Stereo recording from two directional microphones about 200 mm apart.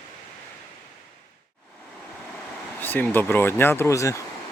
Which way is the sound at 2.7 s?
10° left (ahead or behind).